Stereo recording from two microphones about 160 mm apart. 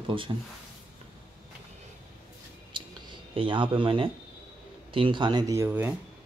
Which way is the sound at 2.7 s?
30° right (ahead or behind).